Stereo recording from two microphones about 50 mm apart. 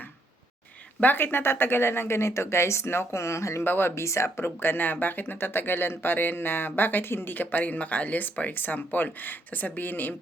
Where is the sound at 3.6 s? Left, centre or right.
Left.